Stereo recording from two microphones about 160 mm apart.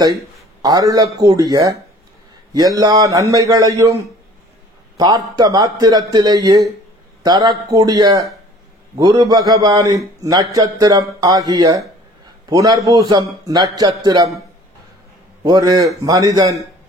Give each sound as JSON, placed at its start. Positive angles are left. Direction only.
{"t": 0.6, "sound": "a man's voice", "side_deg": -25}
{"t": 15.4, "sound": "a man's voice", "side_deg": -25}